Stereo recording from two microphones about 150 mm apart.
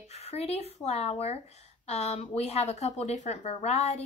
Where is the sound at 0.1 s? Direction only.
45° left (ahead or behind).